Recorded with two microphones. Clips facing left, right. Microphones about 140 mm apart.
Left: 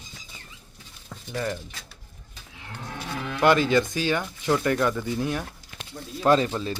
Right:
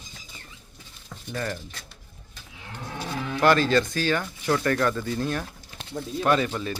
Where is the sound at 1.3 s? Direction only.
15° left (ahead or behind).